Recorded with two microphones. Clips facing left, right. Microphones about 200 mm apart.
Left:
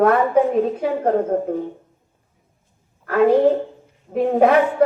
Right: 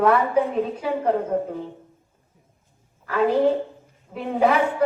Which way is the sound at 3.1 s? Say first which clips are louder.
Left 5 dB; 45° left (ahead or behind).